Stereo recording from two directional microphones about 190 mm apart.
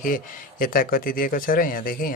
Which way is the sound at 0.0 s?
45° left (ahead or behind).